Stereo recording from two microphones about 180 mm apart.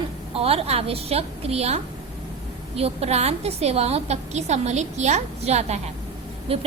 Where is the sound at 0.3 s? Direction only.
35° right (ahead or behind).